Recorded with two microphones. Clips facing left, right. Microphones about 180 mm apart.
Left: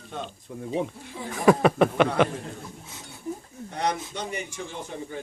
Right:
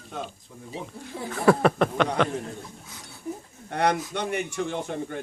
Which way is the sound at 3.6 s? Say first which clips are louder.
Right 4 dB; 60° right (ahead or behind).